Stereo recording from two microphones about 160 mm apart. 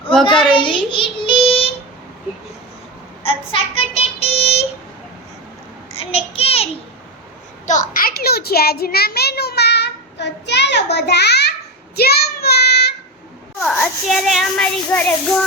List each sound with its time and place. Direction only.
0.5 s child singing: 30° left (ahead or behind)
3.2 s child singing: 35° left (ahead or behind)
6.0 s child singing: 35° left (ahead or behind)
7.7 s a sound: 55° left (ahead or behind); by 11.5 s 90° left
11.9 s child singing: 80° left
13.6 s a sound: 5° left (ahead or behind)
14.8 s child singing: 10° left (ahead or behind)